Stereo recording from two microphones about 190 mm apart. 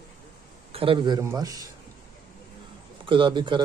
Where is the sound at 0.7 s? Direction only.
30° right (ahead or behind).